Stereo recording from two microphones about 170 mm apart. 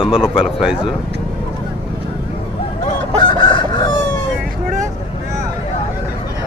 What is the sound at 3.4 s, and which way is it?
Crowing, 30° left (ahead or behind).